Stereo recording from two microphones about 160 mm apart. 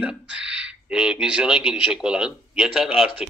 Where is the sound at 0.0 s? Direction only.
5° right (ahead or behind).